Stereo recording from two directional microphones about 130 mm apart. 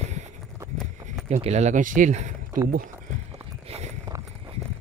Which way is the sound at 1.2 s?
55° right (ahead or behind).